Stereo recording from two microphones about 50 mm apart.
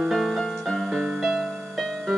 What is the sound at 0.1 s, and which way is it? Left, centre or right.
Keyboard, centre.